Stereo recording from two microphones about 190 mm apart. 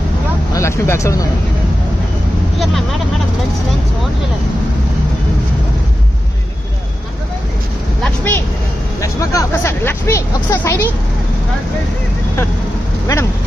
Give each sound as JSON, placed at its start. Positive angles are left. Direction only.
{"t": 0.5, "sound": "speech", "side_deg": 15}
{"t": 8.0, "sound": "speech", "side_deg": 10}